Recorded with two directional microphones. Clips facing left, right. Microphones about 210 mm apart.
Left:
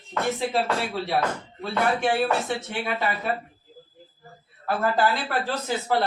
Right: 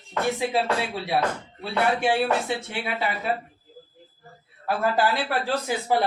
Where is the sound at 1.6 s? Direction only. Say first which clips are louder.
Even; 10° right (ahead or behind).